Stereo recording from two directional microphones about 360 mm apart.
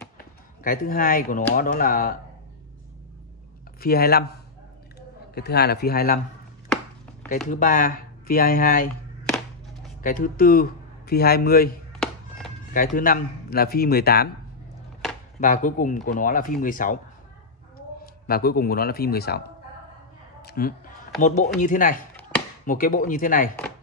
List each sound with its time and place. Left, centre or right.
0.7 s speech: left
3.8 s speech: left
5.3 s speech: left
7.4 s speech: left
10.0 s speech: left
12.0 s music: centre
12.7 s speech: left
15.4 s speech: left
18.2 s speech: left
20.4 s a sound: left
21.2 s speech: left